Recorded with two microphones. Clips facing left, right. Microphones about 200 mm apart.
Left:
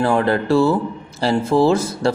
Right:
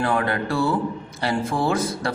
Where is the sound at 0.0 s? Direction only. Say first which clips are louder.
Left 5 dB; 30° left (ahead or behind).